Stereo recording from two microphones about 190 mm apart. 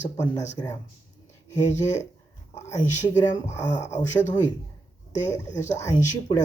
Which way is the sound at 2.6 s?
15° left (ahead or behind).